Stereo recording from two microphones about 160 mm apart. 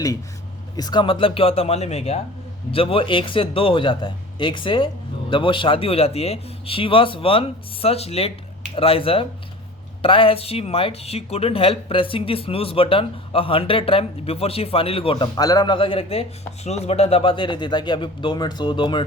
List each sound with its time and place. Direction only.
0.8 s speech: 25° left (ahead or behind)